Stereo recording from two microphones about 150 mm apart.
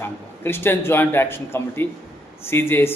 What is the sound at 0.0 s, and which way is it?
A man's voice, 15° left (ahead or behind).